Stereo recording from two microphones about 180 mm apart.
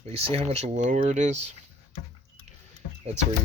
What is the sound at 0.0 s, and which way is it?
Speech, 35° right (ahead or behind).